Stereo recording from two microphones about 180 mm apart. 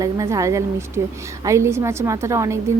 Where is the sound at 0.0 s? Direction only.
20° right (ahead or behind).